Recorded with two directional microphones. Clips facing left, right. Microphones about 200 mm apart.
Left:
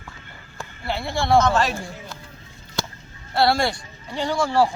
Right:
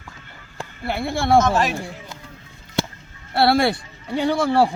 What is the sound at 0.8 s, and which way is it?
Speech, 55° right (ahead or behind).